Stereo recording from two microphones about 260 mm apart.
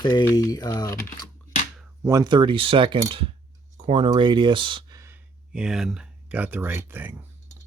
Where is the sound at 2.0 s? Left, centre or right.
Centre.